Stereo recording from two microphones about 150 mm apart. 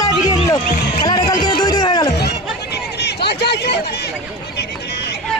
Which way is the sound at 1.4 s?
25° left (ahead or behind).